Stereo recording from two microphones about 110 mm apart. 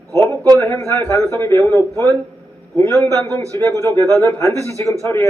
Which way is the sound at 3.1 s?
25° left (ahead or behind).